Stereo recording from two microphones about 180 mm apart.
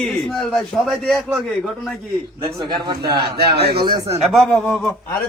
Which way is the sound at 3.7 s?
25° right (ahead or behind).